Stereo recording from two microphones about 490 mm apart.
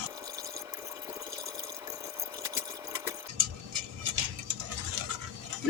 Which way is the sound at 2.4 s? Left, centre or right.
Centre.